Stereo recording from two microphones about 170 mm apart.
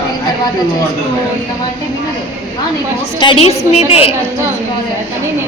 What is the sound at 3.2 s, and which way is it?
Speech, 30° left (ahead or behind).